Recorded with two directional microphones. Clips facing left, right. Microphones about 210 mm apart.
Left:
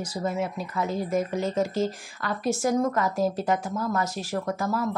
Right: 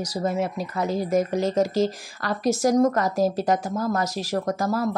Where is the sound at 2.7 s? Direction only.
40° right (ahead or behind).